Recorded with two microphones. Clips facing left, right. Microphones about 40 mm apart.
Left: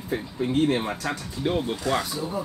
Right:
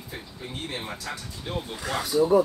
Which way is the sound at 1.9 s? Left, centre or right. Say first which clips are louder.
Left 1 dB; centre.